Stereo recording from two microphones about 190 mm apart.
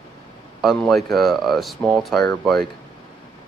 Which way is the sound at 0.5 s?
Centre (ahead or behind).